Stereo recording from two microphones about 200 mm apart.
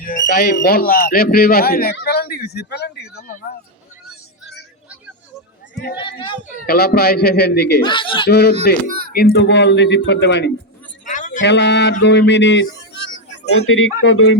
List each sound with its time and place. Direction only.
0.3 s speech: 50° left (ahead or behind)
5.7 s a sound: 50° left (ahead or behind)
6.0 s speech: 25° left (ahead or behind)
6.7 s speech: 50° left (ahead or behind)
7.9 s speech: 25° left (ahead or behind)
8.3 s speech: 55° left (ahead or behind)
11.0 s a sound: 40° left (ahead or behind)
11.3 s speech: 60° left (ahead or behind); by 13.9 s 90° left
14.0 s speech: 70° left (ahead or behind)